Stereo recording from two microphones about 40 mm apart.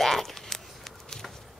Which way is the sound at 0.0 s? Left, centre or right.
Centre.